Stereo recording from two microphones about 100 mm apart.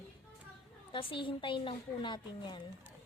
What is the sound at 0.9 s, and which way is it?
A woman's voice, 60° left (ahead or behind).